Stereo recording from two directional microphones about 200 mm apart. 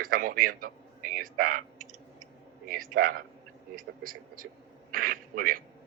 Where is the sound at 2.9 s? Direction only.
45° right (ahead or behind).